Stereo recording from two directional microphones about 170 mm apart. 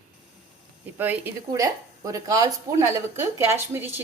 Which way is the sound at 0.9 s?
10° right (ahead or behind).